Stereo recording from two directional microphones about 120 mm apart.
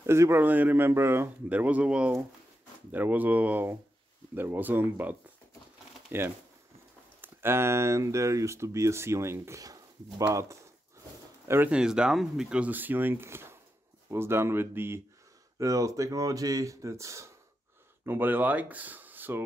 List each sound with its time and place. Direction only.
0.0 s speech: 20° right (ahead or behind)
11.7 s speech: 5° right (ahead or behind)